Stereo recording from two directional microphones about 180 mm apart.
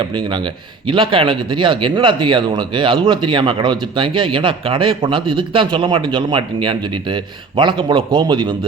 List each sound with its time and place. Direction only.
0.0 s speech: 25° right (ahead or behind)